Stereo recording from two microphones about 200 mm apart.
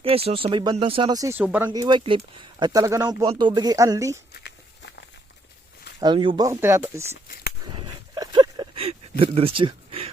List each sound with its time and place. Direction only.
0.0 s speech: 30° right (ahead or behind); by 1.8 s 10° right (ahead or behind)
1.8 s speech: 25° right (ahead or behind)
4.4 s walk: 60° left (ahead or behind)
6.0 s speech: 25° right (ahead or behind)
7.6 s a sound: 20° right (ahead or behind)